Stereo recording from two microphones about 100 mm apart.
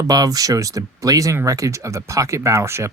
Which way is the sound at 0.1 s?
40° right (ahead or behind).